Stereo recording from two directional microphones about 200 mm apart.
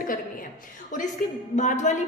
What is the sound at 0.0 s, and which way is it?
Speech, 45° left (ahead or behind).